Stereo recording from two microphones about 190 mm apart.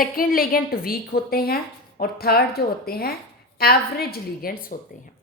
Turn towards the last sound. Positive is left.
turn(degrees=50)  # may be behind; listen again after turning